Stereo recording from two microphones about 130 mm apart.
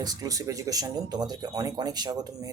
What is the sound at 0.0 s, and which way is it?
Speech, 30° right (ahead or behind).